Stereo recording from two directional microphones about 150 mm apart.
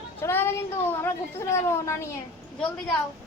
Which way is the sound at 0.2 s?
15° left (ahead or behind).